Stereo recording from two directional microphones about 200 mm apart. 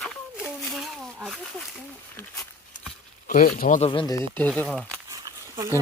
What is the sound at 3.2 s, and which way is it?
Speech, 45° left (ahead or behind).